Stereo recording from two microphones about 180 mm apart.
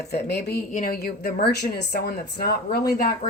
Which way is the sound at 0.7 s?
55° left (ahead or behind).